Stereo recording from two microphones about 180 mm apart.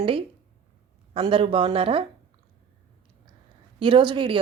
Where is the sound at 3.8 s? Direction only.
25° right (ahead or behind).